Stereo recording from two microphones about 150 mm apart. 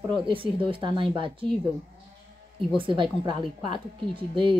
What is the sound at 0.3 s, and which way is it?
Speech, 35° right (ahead or behind).